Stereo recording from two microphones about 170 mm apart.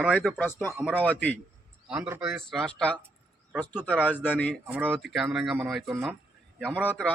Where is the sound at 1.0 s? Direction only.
10° left (ahead or behind).